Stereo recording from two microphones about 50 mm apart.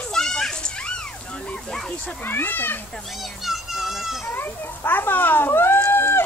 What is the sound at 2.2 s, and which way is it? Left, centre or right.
Speech, left.